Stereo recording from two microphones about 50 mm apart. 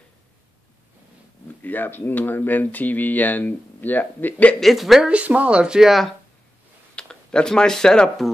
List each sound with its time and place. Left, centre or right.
1.6 s speech: left
4.6 s a woman's voice: centre
5.0 s speech: right
5.6 s speech: centre
7.0 s speech: centre